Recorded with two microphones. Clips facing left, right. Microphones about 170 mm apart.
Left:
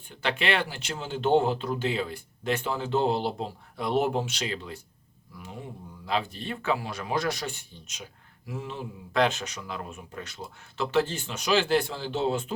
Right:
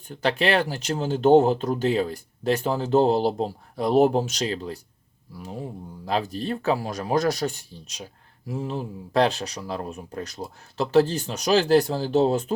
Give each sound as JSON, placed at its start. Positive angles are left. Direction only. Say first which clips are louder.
{"t": 0.1, "sound": "speech", "louder": "right 6 dB", "side_deg": -40}